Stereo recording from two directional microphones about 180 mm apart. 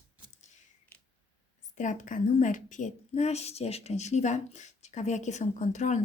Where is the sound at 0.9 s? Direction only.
10° left (ahead or behind).